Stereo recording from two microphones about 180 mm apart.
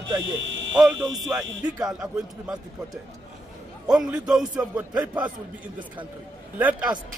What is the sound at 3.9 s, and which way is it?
A man's voice, 5° right (ahead or behind).